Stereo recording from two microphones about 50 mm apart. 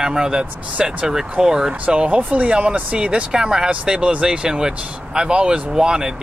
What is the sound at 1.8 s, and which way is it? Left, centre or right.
Speech, right.